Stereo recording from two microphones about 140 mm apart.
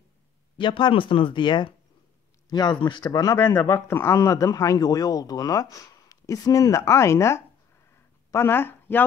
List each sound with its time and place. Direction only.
0.6 s a man's voice: 35° left (ahead or behind); by 9.0 s 15° left (ahead or behind)